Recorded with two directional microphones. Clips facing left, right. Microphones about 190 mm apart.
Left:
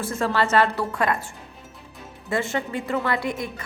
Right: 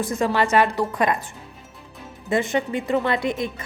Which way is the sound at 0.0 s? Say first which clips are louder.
Right 2 dB; 15° right (ahead or behind).